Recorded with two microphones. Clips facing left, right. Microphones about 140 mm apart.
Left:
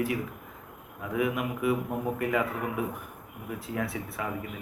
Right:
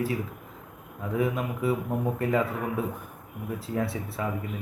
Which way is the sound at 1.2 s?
30° right (ahead or behind).